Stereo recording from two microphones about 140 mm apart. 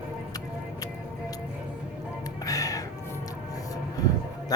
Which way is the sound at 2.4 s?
25° left (ahead or behind).